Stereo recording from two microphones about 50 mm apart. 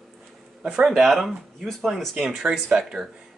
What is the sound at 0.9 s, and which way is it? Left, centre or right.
Speech, centre.